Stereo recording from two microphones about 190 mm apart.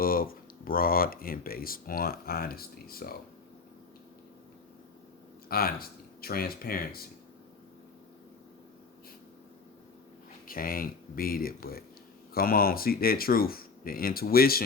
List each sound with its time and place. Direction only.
0.0 s speech: 50° left (ahead or behind)
5.5 s speech: 50° left (ahead or behind)
10.4 s speech: 50° left (ahead or behind)